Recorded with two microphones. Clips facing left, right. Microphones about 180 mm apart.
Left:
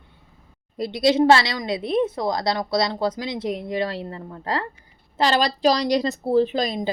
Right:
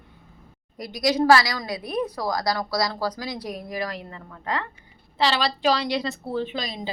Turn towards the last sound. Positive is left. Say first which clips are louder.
# left 8 dB
turn(degrees=50)  # may be behind; listen again after turning